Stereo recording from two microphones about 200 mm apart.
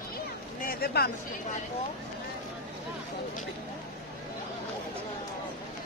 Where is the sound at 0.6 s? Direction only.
50° left (ahead or behind).